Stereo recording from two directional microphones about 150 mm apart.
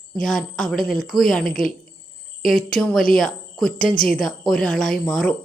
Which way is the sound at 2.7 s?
5° left (ahead or behind).